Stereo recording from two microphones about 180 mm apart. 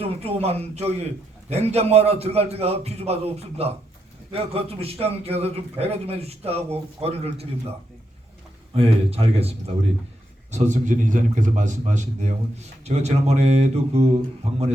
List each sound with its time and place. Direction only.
0.0 s a man's voice: 35° right (ahead or behind)
8.7 s a man's voice: 35° right (ahead or behind)